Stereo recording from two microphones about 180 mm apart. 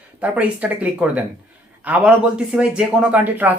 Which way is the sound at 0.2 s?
10° right (ahead or behind).